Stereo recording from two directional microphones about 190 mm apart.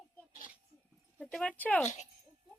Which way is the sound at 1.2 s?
5° left (ahead or behind).